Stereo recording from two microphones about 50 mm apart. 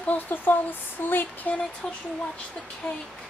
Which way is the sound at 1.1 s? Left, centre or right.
Left.